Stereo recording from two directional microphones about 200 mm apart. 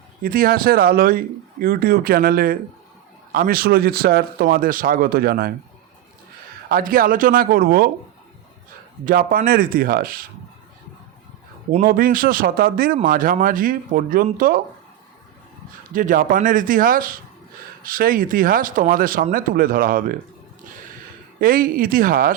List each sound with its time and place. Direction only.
0.2 s speech: 45° right (ahead or behind)
6.7 s speech: 45° right (ahead or behind)
9.0 s speech: 45° right (ahead or behind)
11.7 s speech: 45° right (ahead or behind)
16.0 s speech: 45° right (ahead or behind)
21.4 s speech: 45° right (ahead or behind)